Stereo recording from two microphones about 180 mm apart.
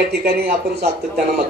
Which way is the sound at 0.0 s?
60° right (ahead or behind).